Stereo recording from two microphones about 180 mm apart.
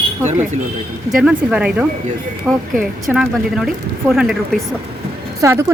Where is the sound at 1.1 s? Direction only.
5° right (ahead or behind).